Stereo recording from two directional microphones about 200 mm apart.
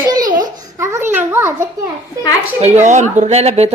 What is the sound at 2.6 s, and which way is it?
Speech, 35° right (ahead or behind).